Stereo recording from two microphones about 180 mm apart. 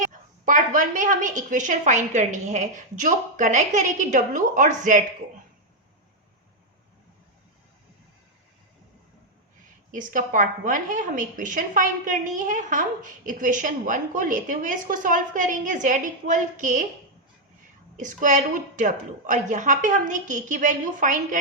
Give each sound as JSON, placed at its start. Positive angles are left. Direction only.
{"t": 0.1, "sound": "a woman's voice", "side_deg": -45}
{"t": 9.9, "sound": "a woman's voice", "side_deg": -45}
{"t": 17.9, "sound": "a woman's voice", "side_deg": -45}